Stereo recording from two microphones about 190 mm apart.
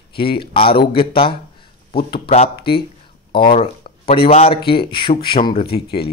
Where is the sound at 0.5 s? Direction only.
30° left (ahead or behind).